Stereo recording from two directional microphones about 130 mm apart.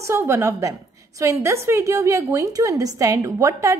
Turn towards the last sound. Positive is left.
turn(degrees=-25)  # may be behind; listen again after turning